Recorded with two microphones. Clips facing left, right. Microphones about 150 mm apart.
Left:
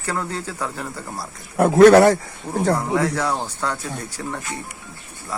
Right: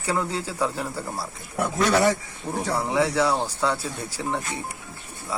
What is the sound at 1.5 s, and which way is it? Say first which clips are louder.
Speech: left 11 dB; 60° left (ahead or behind).